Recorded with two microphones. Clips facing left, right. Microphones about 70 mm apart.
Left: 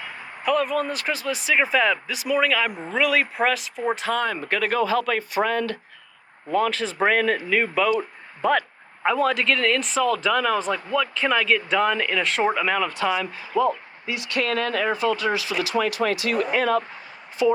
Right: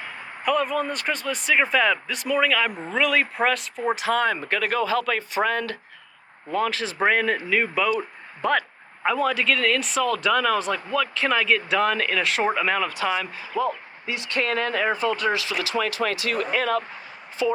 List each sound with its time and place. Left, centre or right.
0.4 s speech: centre
4.1 s speech: right
4.5 s speech: left
5.4 s speech: right
6.5 s speech: centre
13.1 s speech: right
13.5 s speech: left
14.1 s speech: right
15.4 s speech: left
16.6 s speech: left